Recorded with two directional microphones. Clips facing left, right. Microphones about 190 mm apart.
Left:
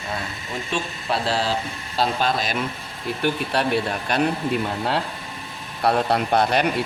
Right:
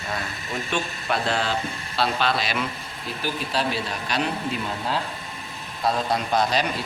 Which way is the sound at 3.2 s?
60° left (ahead or behind).